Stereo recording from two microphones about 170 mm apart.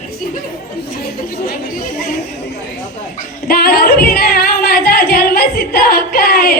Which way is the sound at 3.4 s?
60° left (ahead or behind).